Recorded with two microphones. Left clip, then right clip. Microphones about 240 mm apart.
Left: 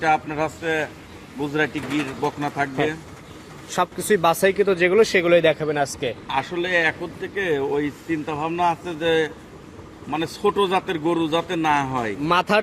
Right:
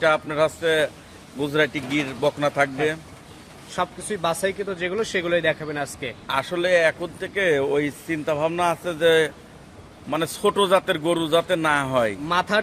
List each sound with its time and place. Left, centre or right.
0.0 s a man's voice: right
3.7 s speech: left; by 6.1 s centre
6.2 s a man's voice: right
12.3 s speech: left